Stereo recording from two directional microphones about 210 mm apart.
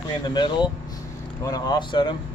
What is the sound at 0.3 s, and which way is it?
Speech, 20° left (ahead or behind).